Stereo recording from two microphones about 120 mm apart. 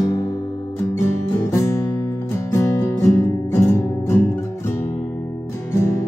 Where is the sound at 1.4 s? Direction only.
25° left (ahead or behind).